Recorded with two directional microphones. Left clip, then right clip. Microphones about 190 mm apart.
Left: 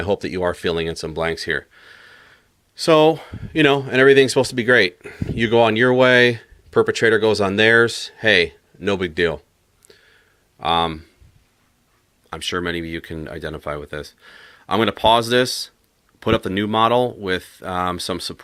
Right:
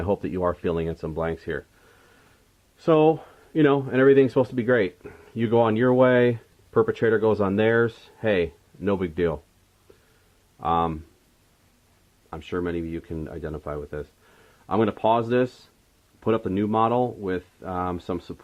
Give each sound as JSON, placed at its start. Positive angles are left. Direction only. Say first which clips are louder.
{"t": 0.0, "sound": "speech", "louder": "left 4 dB", "side_deg": 10}
{"t": 2.8, "sound": "speech", "louder": "left 5 dB", "side_deg": 20}
{"t": 10.6, "sound": "speech", "louder": "left 4 dB", "side_deg": 15}
{"t": 12.3, "sound": "speech", "louder": "left 5 dB", "side_deg": 20}